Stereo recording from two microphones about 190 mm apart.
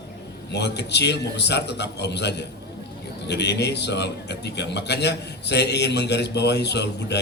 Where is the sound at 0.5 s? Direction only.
60° left (ahead or behind).